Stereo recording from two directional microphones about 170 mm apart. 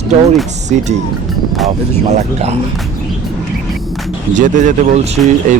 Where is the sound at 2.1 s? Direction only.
40° right (ahead or behind).